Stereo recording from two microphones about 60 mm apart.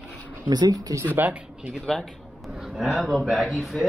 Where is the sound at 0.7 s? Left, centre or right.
Right.